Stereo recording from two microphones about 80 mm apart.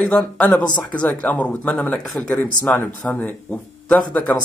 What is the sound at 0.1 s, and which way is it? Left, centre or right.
Speech, centre.